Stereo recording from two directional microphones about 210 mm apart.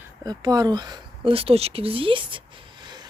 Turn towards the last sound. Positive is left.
turn(degrees=-20)  # may be behind; listen again after turning